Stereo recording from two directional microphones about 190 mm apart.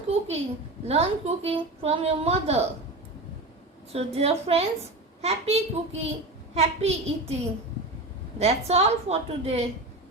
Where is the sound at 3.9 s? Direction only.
35° right (ahead or behind).